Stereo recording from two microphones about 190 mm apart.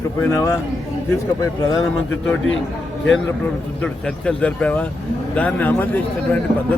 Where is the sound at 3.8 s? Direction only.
5° left (ahead or behind).